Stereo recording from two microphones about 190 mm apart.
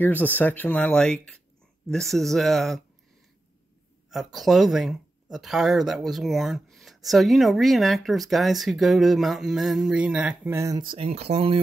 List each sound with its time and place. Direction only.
0.0 s speech: 10° left (ahead or behind)
4.1 s speech: centre (ahead or behind); by 11.6 s 30° right (ahead or behind)